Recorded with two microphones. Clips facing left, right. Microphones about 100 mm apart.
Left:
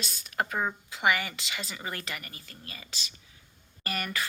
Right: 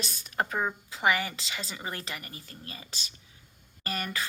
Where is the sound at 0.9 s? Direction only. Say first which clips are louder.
Even; 30° right (ahead or behind).